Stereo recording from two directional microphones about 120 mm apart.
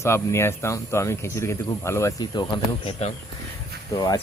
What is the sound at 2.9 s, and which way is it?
Speech, 60° left (ahead or behind).